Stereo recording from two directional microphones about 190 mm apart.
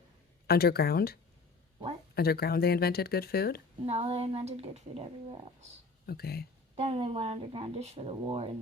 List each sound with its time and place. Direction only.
0.4 s speech: 55° left (ahead or behind)
3.8 s speech: 30° right (ahead or behind)
6.1 s speech: 55° left (ahead or behind)
6.7 s speech: 30° right (ahead or behind)